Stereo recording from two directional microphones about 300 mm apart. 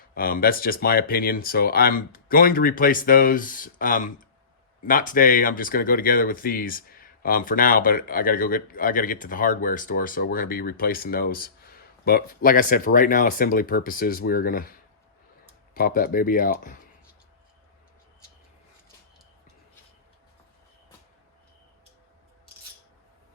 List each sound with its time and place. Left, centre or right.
0.1 s speech: left
15.7 s speech: left